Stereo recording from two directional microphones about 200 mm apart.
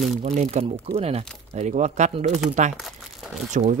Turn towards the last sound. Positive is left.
turn(degrees=-35)  # may be behind; listen again after turning